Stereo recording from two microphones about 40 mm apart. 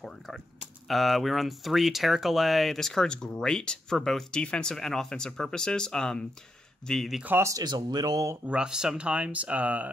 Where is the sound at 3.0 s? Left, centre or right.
Left.